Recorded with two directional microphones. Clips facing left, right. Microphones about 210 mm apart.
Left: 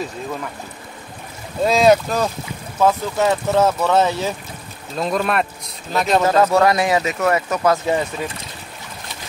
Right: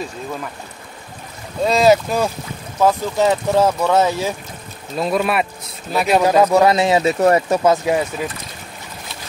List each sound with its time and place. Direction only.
1.6 s speech: centre (ahead or behind); by 7.7 s 30° right (ahead or behind)
7.7 s speech: 10° right (ahead or behind)